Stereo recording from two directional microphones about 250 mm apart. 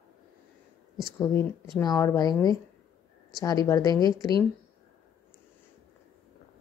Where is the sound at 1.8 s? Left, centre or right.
Centre.